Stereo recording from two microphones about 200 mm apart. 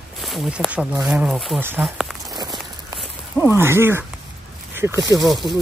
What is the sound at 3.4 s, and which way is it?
Speech, 10° right (ahead or behind).